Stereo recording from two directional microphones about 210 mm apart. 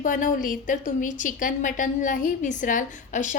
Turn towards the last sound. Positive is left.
turn(degrees=35)  # may be behind; listen again after turning